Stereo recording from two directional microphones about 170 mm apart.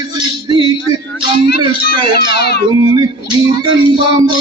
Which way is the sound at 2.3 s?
70° left (ahead or behind).